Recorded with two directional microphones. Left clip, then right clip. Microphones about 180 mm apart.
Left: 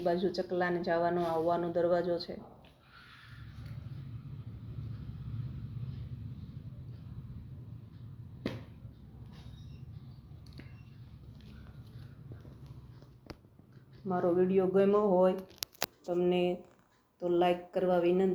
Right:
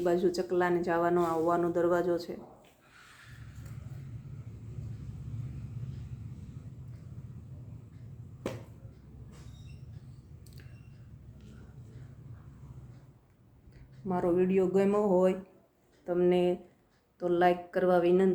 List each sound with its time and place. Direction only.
0.0 s speech: 20° right (ahead or behind)
14.1 s speech: 10° right (ahead or behind)